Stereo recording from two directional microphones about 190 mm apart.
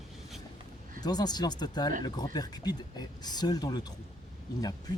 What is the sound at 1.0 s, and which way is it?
Speech, 20° left (ahead or behind).